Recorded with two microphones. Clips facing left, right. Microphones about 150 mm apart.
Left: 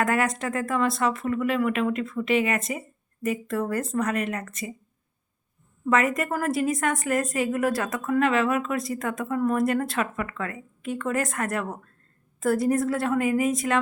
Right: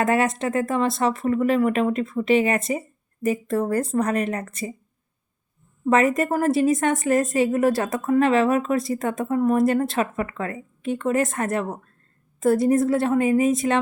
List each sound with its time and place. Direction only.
0.0 s speech: 25° right (ahead or behind)
5.8 s a woman's voice: 30° right (ahead or behind)